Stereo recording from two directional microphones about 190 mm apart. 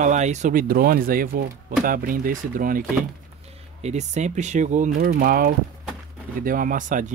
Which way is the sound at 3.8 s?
35° right (ahead or behind).